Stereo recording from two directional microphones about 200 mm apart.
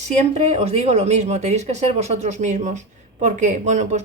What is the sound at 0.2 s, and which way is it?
Speech, 35° right (ahead or behind).